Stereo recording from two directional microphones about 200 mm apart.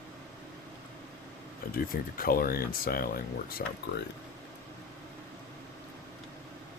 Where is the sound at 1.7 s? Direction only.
45° left (ahead or behind).